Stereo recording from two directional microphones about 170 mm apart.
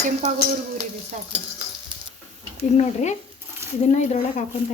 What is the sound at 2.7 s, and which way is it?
Speech, 45° left (ahead or behind).